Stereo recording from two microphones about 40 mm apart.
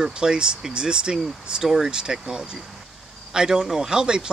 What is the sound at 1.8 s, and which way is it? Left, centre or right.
Speech, centre.